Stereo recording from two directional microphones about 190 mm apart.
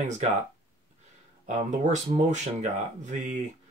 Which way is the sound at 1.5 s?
40° right (ahead or behind).